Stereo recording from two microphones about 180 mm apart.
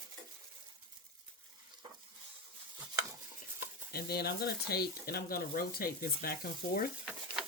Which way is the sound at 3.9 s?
60° left (ahead or behind).